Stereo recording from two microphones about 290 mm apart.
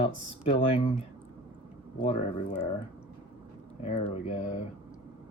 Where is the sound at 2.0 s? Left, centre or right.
Left.